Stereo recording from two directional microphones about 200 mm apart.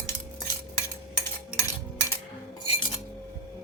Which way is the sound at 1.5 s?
15° left (ahead or behind).